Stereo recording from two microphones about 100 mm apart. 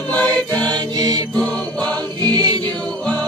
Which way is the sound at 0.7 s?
45° right (ahead or behind).